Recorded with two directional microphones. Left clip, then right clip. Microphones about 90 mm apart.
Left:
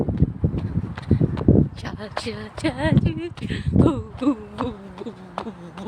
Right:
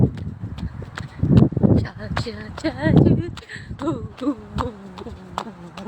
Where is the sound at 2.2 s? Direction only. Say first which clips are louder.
Left 2 dB; 10° left (ahead or behind).